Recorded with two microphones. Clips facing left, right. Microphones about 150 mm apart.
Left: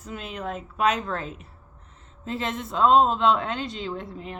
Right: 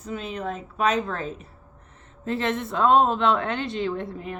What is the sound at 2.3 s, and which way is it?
A woman's voice, 60° right (ahead or behind).